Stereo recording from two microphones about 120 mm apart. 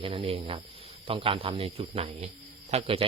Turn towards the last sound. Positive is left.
turn(degrees=-50)  # may be behind; listen again after turning